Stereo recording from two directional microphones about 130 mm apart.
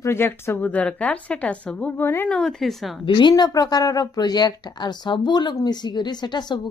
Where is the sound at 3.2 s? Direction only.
35° left (ahead or behind).